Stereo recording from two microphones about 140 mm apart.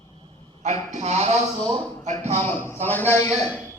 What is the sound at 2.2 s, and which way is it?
Speech, 55° right (ahead or behind).